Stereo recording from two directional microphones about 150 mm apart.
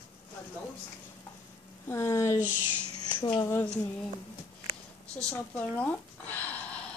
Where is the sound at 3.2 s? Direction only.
20° left (ahead or behind).